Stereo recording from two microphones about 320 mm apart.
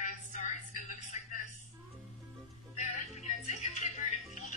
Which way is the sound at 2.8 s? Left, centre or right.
Left.